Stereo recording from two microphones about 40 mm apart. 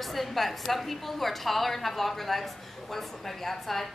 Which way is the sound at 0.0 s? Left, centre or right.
Centre.